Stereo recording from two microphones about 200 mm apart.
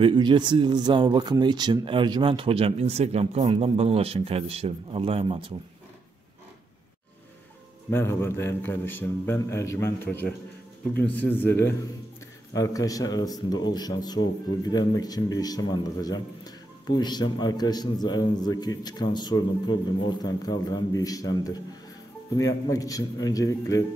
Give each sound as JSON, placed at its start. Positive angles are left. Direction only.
{"t": 0.0, "sound": "speech", "side_deg": -25}
{"t": 7.9, "sound": "a man's voice", "side_deg": 10}